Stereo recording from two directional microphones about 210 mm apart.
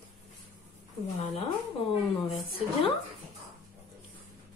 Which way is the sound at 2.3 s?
25° left (ahead or behind).